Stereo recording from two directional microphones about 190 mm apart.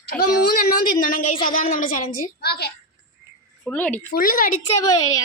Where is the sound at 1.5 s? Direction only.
45° left (ahead or behind).